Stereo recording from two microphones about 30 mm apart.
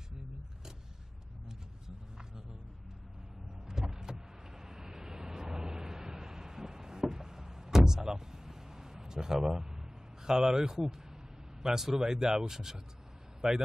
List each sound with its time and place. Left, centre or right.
3.6 s vehicle: centre
11.6 s a man's voice: right